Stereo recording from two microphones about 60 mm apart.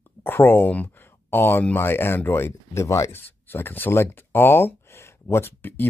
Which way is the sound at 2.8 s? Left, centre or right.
Left.